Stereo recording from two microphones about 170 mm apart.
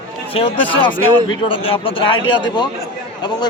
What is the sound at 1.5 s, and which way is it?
Speech, 30° left (ahead or behind).